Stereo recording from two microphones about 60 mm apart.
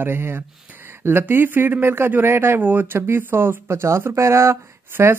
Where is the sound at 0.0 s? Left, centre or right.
Right.